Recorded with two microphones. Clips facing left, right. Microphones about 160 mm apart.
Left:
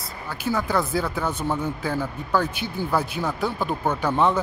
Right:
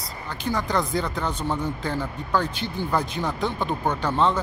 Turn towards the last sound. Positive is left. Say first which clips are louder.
# left 1 dB
turn(degrees=10)  # may be behind; listen again after turning